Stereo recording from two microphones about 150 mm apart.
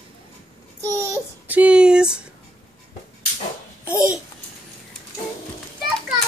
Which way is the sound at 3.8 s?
20° left (ahead or behind).